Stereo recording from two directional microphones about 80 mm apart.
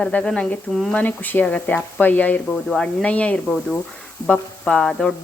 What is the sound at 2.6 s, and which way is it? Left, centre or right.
Speech, centre.